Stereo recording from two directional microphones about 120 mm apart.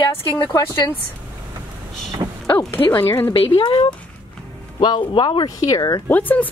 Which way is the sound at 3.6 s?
40° left (ahead or behind).